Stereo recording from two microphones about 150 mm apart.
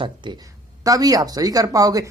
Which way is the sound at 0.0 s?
30° right (ahead or behind).